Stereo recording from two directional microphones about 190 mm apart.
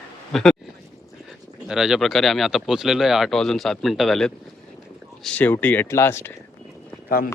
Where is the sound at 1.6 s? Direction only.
5° right (ahead or behind).